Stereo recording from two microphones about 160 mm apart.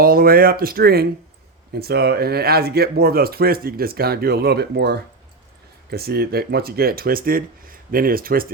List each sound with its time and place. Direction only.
0.0 s speech: 65° right (ahead or behind); by 4.9 s 90° right
5.9 s speech: 75° right (ahead or behind)